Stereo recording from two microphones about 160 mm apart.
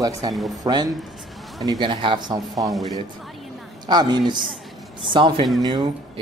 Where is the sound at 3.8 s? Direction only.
25° right (ahead or behind).